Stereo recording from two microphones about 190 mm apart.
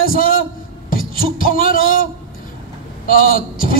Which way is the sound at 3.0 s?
50° left (ahead or behind).